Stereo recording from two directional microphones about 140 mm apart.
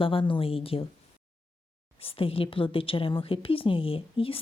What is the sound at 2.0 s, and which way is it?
A woman's voice, 40° left (ahead or behind).